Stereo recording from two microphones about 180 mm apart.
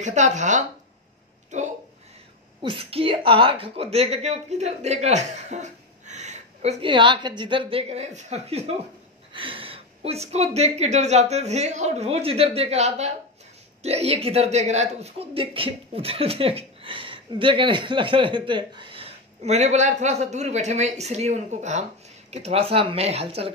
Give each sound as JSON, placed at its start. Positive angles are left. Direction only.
{"t": 0.0, "sound": "speech", "side_deg": -40}
{"t": 2.6, "sound": "speech", "side_deg": -30}